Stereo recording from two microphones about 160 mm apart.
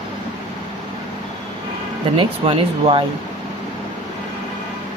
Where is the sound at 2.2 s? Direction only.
35° right (ahead or behind).